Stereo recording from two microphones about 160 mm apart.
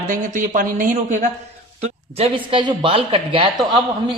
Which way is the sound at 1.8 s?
40° right (ahead or behind).